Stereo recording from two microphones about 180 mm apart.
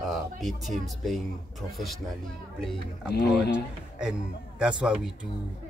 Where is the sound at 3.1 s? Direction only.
65° left (ahead or behind).